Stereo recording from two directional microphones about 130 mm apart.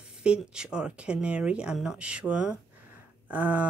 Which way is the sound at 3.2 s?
10° right (ahead or behind).